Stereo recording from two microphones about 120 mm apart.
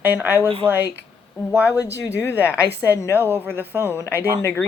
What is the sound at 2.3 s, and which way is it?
A woman's voice, 15° right (ahead or behind).